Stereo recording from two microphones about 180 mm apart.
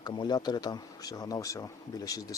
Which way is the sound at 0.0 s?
25° left (ahead or behind).